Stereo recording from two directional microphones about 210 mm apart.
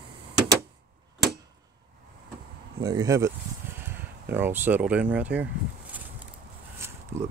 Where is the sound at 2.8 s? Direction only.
20° right (ahead or behind).